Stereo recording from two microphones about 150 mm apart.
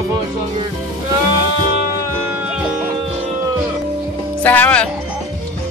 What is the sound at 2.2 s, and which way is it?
Music, 10° right (ahead or behind).